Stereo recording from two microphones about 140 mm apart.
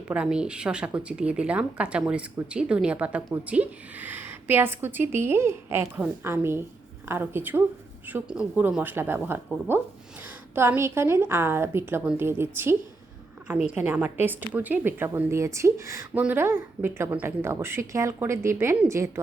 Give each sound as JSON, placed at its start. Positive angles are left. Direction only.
{"t": 0.1, "sound": "a woman's voice", "side_deg": -5}